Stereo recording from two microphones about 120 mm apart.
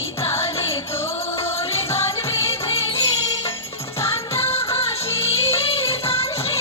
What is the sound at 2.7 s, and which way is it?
Music, 50° left (ahead or behind).